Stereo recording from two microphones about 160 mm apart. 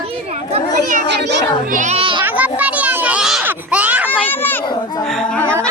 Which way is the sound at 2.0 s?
30° right (ahead or behind).